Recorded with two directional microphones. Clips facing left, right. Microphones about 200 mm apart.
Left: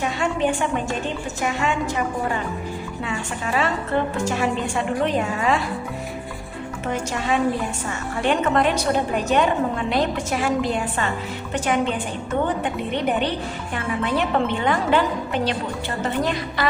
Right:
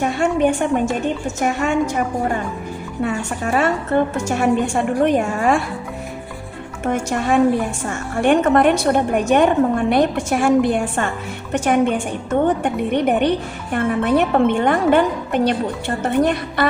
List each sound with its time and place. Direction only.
0.0 s a woman's voice: 45° right (ahead or behind)
3.0 s a woman's voice: 45° right (ahead or behind)
6.8 s a woman's voice: 50° right (ahead or behind)